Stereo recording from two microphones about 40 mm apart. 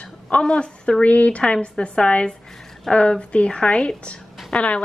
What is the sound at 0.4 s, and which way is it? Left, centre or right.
Speech, left.